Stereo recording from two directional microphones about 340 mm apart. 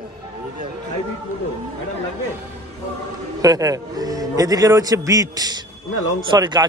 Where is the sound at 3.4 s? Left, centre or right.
Centre.